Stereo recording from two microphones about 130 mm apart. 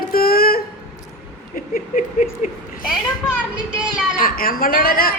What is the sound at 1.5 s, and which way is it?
Speech, 85° left.